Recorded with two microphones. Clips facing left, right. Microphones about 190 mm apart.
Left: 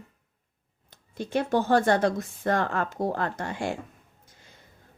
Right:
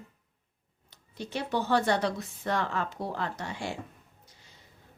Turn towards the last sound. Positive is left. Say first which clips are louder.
# left 5 dB
turn(degrees=50)  # may be behind; listen again after turning